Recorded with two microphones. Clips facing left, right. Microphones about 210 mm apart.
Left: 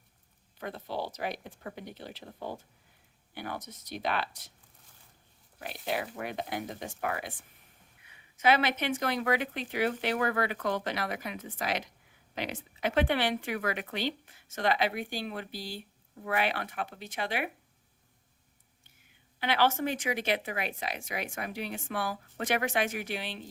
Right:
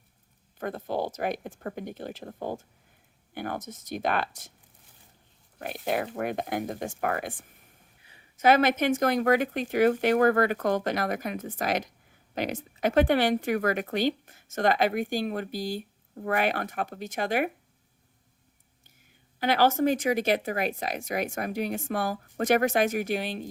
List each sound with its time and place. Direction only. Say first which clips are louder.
0.6 s speech: right 6 dB; 50° right (ahead or behind)
5.5 s speech: right 5 dB; 50° right (ahead or behind)
8.0 s speech: right 5 dB; 40° right (ahead or behind)
19.4 s speech: right 5 dB; 40° right (ahead or behind)